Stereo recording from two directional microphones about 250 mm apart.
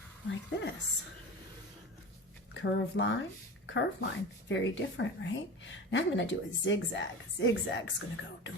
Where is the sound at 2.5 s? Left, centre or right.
Left.